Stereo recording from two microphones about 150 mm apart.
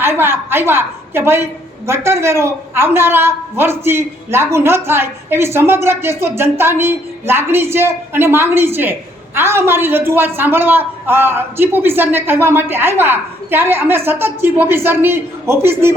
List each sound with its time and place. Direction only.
0.0 s a woman's voice: 15° right (ahead or behind)